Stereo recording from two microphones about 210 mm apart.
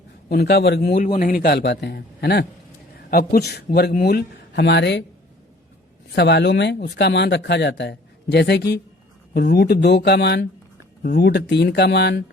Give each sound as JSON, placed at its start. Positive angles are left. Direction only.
{"t": 0.3, "sound": "speech", "side_deg": 50}
{"t": 6.1, "sound": "speech", "side_deg": 55}